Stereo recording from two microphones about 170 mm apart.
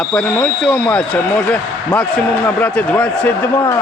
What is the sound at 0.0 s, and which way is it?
Speech, 5° left (ahead or behind).